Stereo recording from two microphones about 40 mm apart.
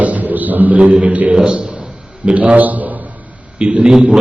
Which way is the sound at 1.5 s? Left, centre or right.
Right.